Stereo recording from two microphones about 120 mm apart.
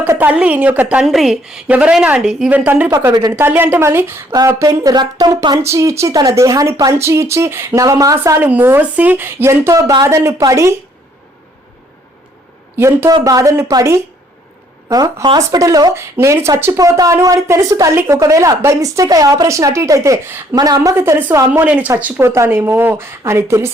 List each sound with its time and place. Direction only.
0.0 s speech: 15° right (ahead or behind)
3.1 s speech: 30° right (ahead or behind)
3.3 s a woman's voice: 20° right (ahead or behind)
4.4 s speech: 30° right (ahead or behind)
5.6 s a woman's voice: 25° right (ahead or behind)
12.7 s a woman's voice: 20° right (ahead or behind)
20.6 s a woman's voice: 30° right (ahead or behind)